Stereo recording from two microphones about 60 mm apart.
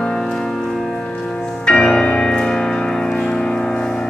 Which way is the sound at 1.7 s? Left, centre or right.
Centre.